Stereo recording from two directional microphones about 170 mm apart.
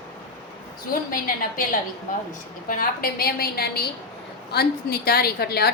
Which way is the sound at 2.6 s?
55° left (ahead or behind).